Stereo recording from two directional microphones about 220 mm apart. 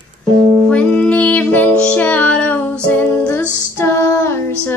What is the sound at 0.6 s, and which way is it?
Music, 5° left (ahead or behind).